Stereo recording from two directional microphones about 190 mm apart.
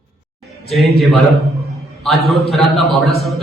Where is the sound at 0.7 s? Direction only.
Centre (ahead or behind).